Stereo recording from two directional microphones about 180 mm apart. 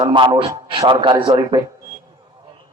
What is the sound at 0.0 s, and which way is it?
A man's voice, 25° right (ahead or behind).